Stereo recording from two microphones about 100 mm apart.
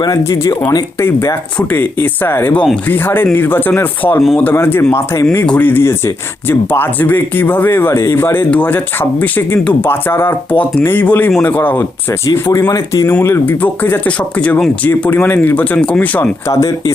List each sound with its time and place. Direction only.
0.0 s speech: 35° left (ahead or behind)
1.0 s speech: 25° left (ahead or behind)
12.2 s speech: 30° left (ahead or behind); by 16.3 s 15° left (ahead or behind)
16.5 s speech: 30° left (ahead or behind)